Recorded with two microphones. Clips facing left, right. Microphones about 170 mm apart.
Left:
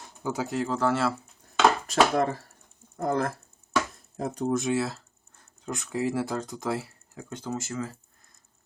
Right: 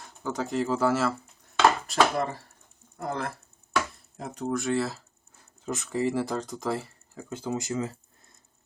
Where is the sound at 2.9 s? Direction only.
40° left (ahead or behind).